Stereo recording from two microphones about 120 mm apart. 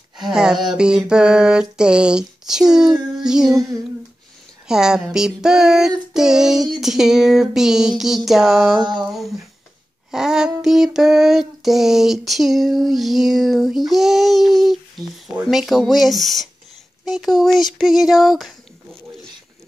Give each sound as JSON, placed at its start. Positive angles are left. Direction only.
{"t": 0.3, "sound": "child singing", "side_deg": -5}
{"t": 4.6, "sound": "child singing", "side_deg": -5}
{"t": 8.8, "sound": "a sound", "side_deg": -35}
{"t": 10.1, "sound": "child singing", "side_deg": -5}